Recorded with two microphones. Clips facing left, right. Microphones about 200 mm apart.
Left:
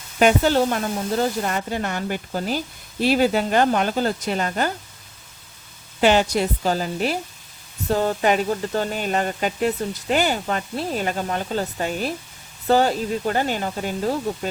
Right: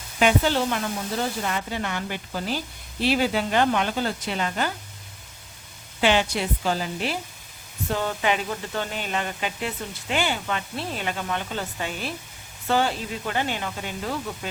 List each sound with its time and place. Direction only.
0.2 s speech: 45° left (ahead or behind)
6.0 s speech: 40° left (ahead or behind)